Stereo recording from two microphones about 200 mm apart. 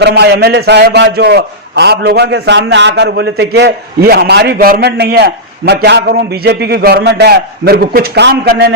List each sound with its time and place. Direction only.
0.0 s a man's voice: 55° right (ahead or behind)